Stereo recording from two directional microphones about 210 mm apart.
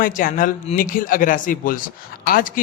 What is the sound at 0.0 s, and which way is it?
Speech, 40° left (ahead or behind).